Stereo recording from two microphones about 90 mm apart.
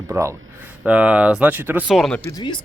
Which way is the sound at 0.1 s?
30° right (ahead or behind).